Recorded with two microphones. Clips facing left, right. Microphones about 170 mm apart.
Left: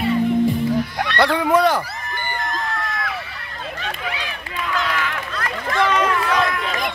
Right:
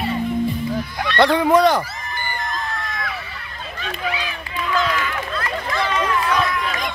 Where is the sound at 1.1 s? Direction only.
10° left (ahead or behind).